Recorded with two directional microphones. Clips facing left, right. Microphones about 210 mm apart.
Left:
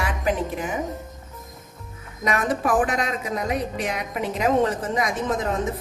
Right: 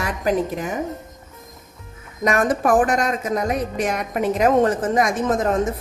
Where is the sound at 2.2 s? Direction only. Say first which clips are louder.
Right 4 dB; 45° right (ahead or behind).